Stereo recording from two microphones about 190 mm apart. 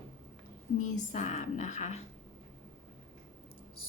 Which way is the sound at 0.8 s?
40° left (ahead or behind).